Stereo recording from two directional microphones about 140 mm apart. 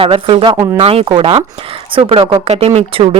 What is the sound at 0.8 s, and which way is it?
Speech, 45° right (ahead or behind).